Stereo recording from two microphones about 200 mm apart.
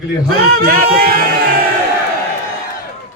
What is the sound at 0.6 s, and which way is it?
Speech, 50° right (ahead or behind).